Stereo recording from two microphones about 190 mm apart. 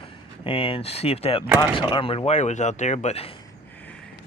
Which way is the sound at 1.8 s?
25° left (ahead or behind).